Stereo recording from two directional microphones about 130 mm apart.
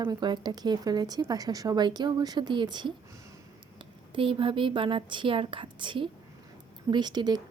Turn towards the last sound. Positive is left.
turn(degrees=-35)  # may be behind; listen again after turning